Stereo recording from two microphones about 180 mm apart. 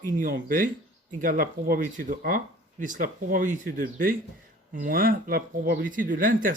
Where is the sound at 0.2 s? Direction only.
50° right (ahead or behind).